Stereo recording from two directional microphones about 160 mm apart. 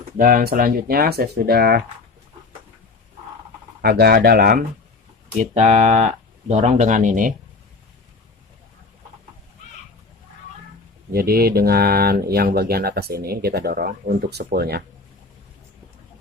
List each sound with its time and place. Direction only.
0.2 s speech: 65° right (ahead or behind)
3.8 s speech: 85° right; by 4.6 s 70° right (ahead or behind)
5.4 s speech: 45° right (ahead or behind)
11.1 s speech: 75° right (ahead or behind)